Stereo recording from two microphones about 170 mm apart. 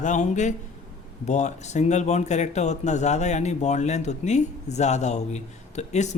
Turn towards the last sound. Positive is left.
turn(degrees=40)  # may be behind; listen again after turning